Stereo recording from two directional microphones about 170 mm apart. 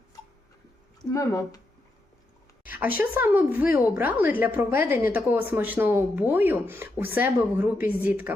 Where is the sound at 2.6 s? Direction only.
10° right (ahead or behind).